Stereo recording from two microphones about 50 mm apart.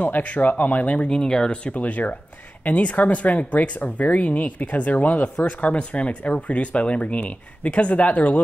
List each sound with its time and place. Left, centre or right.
0.0 s speech: left